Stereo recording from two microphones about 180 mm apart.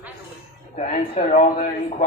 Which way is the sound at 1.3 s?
40° left (ahead or behind).